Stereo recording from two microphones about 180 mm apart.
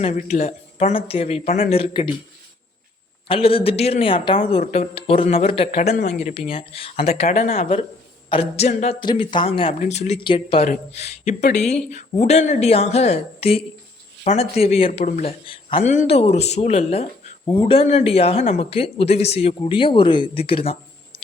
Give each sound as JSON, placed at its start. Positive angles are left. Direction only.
{"t": 0.0, "sound": "speech", "side_deg": 40}
{"t": 3.2, "sound": "speech", "side_deg": 30}